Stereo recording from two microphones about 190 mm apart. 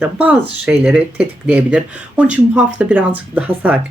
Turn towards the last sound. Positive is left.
turn(degrees=-5)  # may be behind; listen again after turning